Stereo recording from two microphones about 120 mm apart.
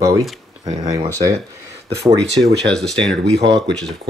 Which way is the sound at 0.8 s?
35° right (ahead or behind).